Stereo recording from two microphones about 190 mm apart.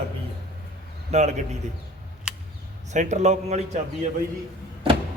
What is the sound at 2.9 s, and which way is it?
Speech, 40° right (ahead or behind).